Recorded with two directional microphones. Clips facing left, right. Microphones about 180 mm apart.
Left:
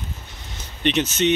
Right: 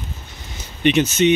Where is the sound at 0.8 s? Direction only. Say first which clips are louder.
Right 5 dB; 5° right (ahead or behind).